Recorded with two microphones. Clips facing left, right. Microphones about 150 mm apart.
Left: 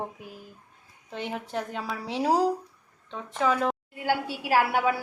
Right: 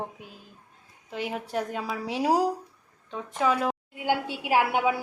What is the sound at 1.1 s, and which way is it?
A woman's voice, 5° right (ahead or behind).